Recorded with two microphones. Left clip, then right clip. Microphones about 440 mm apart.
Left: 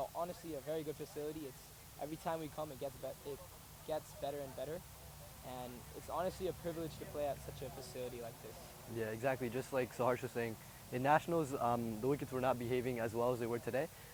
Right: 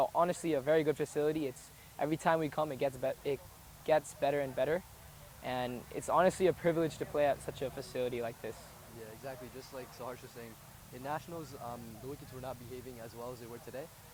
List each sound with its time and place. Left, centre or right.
0.0 s speech: right
9.2 s speech: left